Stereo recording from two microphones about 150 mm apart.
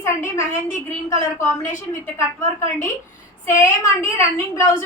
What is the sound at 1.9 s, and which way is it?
A woman's voice, 20° left (ahead or behind).